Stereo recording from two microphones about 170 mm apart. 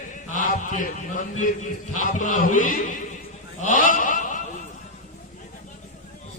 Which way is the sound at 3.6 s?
50° left (ahead or behind).